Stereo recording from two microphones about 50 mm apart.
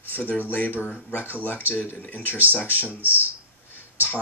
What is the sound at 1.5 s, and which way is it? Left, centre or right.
Speech, right.